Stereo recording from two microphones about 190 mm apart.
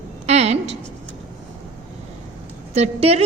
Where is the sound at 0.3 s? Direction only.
35° right (ahead or behind).